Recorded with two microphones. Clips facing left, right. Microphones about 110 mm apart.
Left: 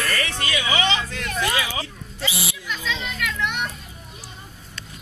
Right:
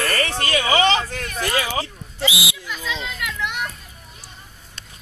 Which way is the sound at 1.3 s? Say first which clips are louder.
Right 1 dB; 40° right (ahead or behind).